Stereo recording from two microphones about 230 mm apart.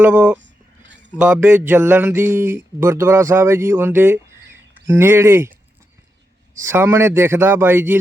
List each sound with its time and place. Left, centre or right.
0.0 s speech: centre
0.3 s a sound: right
1.2 s speech: centre
6.7 s speech: centre